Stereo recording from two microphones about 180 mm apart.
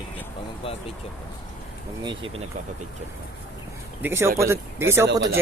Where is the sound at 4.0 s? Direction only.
15° right (ahead or behind).